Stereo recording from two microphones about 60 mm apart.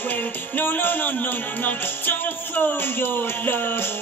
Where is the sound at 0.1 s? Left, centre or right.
Left.